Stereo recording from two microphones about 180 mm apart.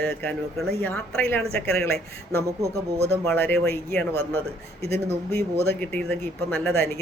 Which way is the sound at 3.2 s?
5° left (ahead or behind).